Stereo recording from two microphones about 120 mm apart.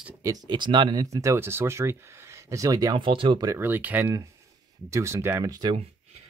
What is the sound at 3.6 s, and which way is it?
Speech, 15° right (ahead or behind).